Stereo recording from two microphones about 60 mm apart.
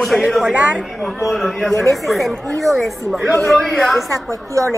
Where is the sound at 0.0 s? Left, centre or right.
Centre.